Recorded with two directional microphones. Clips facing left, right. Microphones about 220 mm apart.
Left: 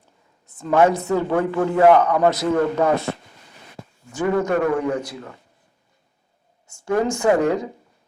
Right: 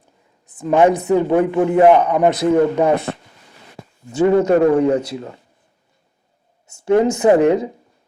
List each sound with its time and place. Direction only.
0.4 s a man's voice: 15° right (ahead or behind)
4.1 s a man's voice: 25° right (ahead or behind)
6.7 s a man's voice: 20° right (ahead or behind)